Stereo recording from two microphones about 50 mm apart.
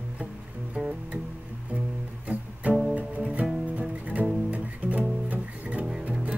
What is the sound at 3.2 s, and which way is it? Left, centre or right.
Music, right.